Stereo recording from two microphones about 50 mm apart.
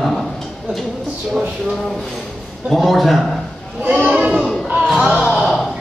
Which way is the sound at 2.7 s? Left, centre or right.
Centre.